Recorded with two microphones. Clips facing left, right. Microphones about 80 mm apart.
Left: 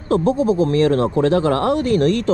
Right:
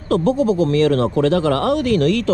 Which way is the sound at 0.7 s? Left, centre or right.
Left.